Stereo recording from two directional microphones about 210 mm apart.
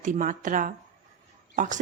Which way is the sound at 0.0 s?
40° right (ahead or behind).